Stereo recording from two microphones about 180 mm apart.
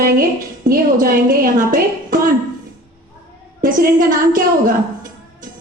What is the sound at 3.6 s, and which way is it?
A woman's voice, 50° right (ahead or behind).